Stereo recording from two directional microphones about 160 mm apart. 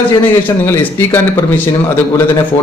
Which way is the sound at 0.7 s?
15° left (ahead or behind).